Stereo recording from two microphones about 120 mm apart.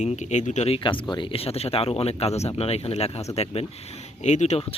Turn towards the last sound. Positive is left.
turn(degrees=70)  # may be behind; listen again after turning